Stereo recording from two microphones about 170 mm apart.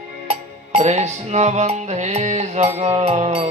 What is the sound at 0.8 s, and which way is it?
Music, 40° right (ahead or behind).